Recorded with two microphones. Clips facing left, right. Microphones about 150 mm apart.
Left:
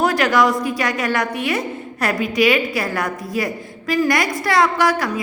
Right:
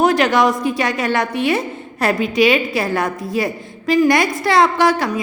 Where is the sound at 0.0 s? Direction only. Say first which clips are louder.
Right 2 dB; 20° right (ahead or behind).